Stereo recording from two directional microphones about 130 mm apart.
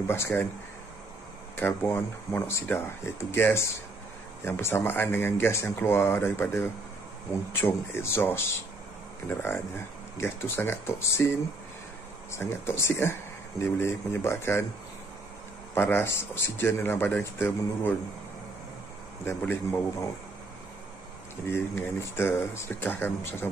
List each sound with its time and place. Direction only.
0.0 s speech: 20° left (ahead or behind)
1.6 s speech: 20° left (ahead or behind)
12.3 s speech: 20° left (ahead or behind)
15.7 s speech: 20° left (ahead or behind)
19.2 s speech: 15° left (ahead or behind)
21.5 s speech: 20° left (ahead or behind)